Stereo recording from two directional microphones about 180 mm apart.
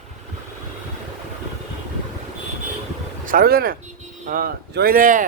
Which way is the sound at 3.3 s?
55° right (ahead or behind).